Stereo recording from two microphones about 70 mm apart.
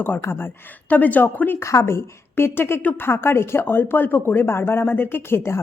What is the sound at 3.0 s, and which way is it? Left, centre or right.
Speech, left.